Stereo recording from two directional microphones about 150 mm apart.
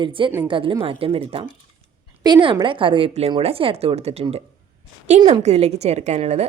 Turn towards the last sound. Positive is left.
turn(degrees=-45)  # may be behind; listen again after turning